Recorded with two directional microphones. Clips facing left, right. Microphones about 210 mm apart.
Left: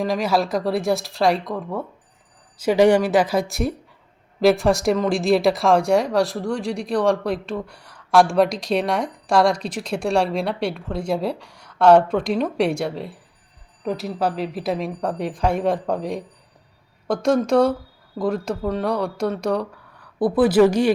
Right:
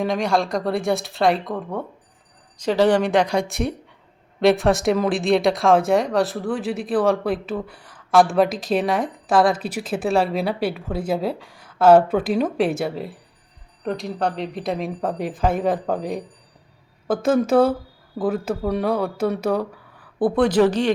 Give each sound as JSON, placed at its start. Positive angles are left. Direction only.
{"t": 0.0, "sound": "speech", "side_deg": 0}
{"t": 2.6, "sound": "speech", "side_deg": 10}